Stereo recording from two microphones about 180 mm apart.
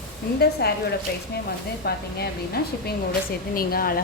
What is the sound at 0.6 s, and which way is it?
Speech, 65° left (ahead or behind).